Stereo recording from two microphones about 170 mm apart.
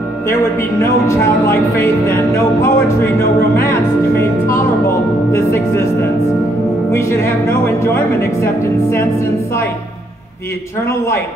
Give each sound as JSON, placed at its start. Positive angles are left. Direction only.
{"t": 1.0, "sound": "speech", "side_deg": 15}
{"t": 5.3, "sound": "speech", "side_deg": 15}
{"t": 6.9, "sound": "speech", "side_deg": 15}